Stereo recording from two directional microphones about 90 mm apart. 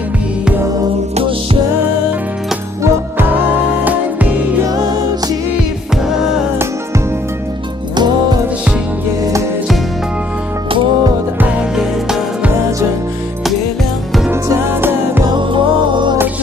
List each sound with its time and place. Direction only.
2.8 s music: 25° right (ahead or behind)
4.6 s music: 45° right (ahead or behind)
7.9 s music: 55° right (ahead or behind)
11.5 s music: 5° right (ahead or behind)
14.3 s music: 30° right (ahead or behind)
15.2 s music: 60° right (ahead or behind)